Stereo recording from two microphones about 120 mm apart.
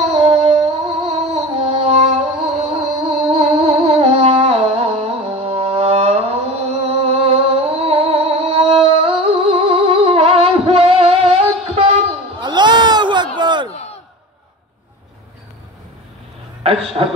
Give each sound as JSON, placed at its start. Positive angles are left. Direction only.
{"t": 0.1, "sound": "music", "side_deg": -55}
{"t": 12.4, "sound": "a sound", "side_deg": -40}
{"t": 16.6, "sound": "a man's voice", "side_deg": -55}